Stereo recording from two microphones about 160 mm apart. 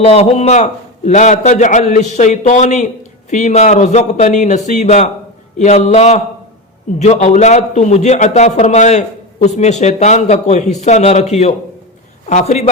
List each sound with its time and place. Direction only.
0.0 s a man's voice: 40° left (ahead or behind)